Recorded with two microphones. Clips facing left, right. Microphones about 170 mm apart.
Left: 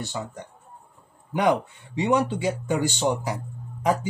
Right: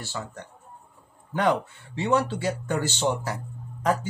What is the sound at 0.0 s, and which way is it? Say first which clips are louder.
Speech: left 3 dB; 20° left (ahead or behind).